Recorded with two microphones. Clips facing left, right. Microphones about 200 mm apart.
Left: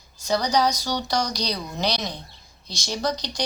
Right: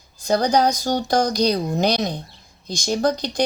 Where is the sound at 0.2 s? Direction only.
55° right (ahead or behind).